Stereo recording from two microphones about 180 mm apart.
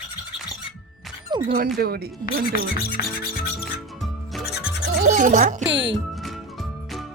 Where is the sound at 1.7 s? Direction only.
60° right (ahead or behind).